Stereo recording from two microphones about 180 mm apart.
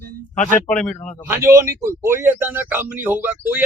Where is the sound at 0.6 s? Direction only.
5° left (ahead or behind).